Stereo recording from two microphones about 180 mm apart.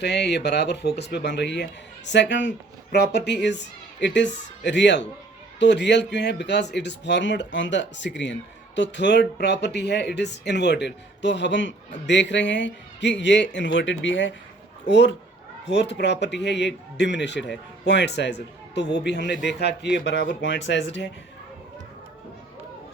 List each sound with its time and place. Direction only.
0.0 s speech: 70° left (ahead or behind)
2.9 s speech: 65° left (ahead or behind); by 14.3 s 90° left
14.8 s speech: 75° left (ahead or behind)